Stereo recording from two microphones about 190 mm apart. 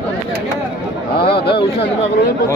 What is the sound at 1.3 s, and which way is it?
Speech, 55° left (ahead or behind).